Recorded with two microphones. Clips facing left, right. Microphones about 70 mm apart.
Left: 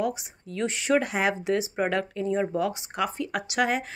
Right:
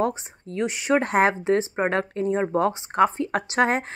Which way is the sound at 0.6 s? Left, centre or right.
Right.